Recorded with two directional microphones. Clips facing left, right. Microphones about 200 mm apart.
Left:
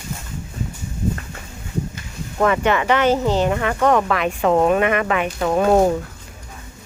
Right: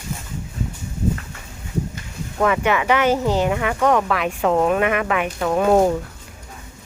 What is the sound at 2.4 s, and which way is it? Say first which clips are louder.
Speech: left 1 dB; 5° right (ahead or behind).